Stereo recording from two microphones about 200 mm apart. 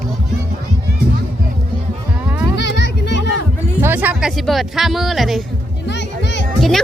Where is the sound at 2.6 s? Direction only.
60° left (ahead or behind).